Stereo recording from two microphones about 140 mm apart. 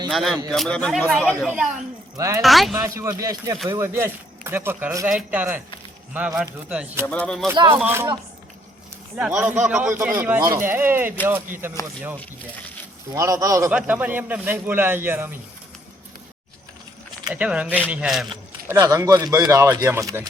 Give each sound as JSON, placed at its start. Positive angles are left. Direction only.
{"t": 0.1, "sound": "speech", "side_deg": 0}
{"t": 2.1, "sound": "a woman's voice", "side_deg": -20}
{"t": 2.4, "sound": "speech", "side_deg": 0}
{"t": 2.8, "sound": "a man's voice", "side_deg": -20}
{"t": 5.0, "sound": "a man's voice", "side_deg": -10}
{"t": 7.1, "sound": "speech", "side_deg": 5}
{"t": 7.5, "sound": "speech", "side_deg": -35}
{"t": 7.8, "sound": "a man's voice", "side_deg": -15}
{"t": 9.1, "sound": "a man's voice", "side_deg": -5}
{"t": 13.1, "sound": "speech", "side_deg": -25}
{"t": 13.7, "sound": "a man's voice", "side_deg": -10}
{"t": 17.3, "sound": "a man's voice", "side_deg": -10}
{"t": 18.7, "sound": "speech", "side_deg": -20}